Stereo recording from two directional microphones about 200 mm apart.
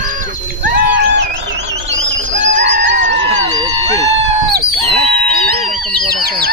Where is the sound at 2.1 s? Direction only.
65° right (ahead or behind).